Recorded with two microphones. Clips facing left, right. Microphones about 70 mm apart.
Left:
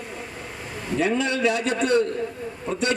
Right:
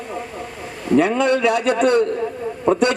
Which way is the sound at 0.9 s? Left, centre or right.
Right.